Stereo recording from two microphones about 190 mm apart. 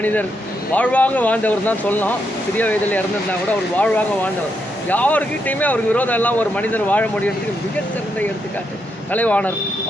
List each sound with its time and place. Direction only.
0.0 s speech: 10° left (ahead or behind)
9.1 s speech: 10° left (ahead or behind)